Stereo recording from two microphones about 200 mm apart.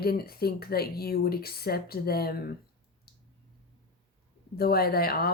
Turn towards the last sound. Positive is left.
turn(degrees=50)  # may be behind; listen again after turning